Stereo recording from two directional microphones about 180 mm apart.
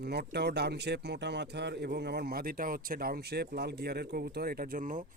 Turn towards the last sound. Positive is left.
turn(degrees=-45)  # may be behind; listen again after turning